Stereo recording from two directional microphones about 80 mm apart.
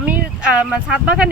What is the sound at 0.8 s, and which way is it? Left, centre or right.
Speech, centre.